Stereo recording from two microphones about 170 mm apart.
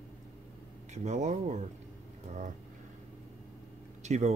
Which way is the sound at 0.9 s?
45° right (ahead or behind).